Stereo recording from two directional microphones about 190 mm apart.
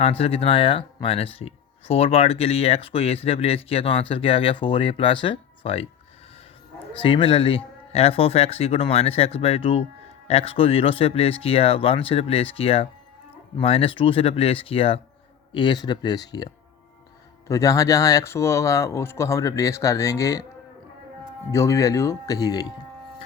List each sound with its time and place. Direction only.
0.0 s speech: 30° left (ahead or behind)
7.0 s speech: 25° left (ahead or behind)
17.5 s speech: 15° left (ahead or behind)
21.5 s speech: 15° left (ahead or behind)